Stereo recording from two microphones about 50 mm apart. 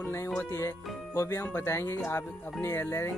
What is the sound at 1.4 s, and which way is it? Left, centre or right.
Speech, left.